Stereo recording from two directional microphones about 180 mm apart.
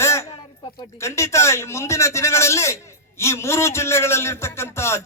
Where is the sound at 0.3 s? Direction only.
30° left (ahead or behind).